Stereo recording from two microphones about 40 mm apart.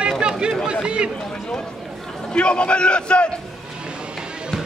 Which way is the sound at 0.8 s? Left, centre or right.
Right.